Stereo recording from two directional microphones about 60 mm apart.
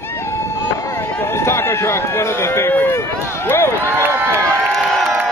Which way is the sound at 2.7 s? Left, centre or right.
Left.